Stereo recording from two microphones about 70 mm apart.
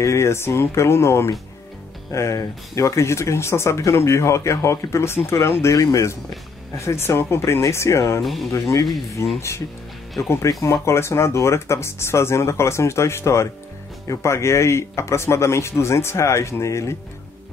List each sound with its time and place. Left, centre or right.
0.0 s speech: left
8.2 s speech: centre
8.5 s speech: left